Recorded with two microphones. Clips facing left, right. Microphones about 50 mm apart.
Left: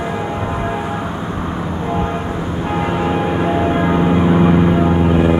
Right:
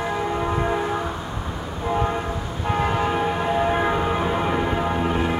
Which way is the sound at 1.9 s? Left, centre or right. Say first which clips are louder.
Left 1 dB; centre.